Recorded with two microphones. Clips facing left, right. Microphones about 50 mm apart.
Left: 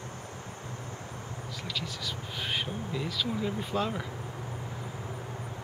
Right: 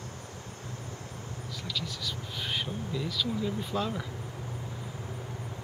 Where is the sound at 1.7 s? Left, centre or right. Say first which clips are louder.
Even; centre.